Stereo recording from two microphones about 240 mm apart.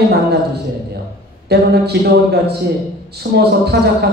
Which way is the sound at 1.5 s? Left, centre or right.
Right.